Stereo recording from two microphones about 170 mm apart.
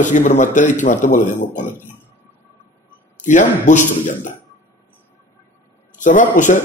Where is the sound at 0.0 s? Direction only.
45° left (ahead or behind).